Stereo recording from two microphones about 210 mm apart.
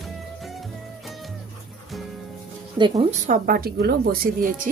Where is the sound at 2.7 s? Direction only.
20° right (ahead or behind).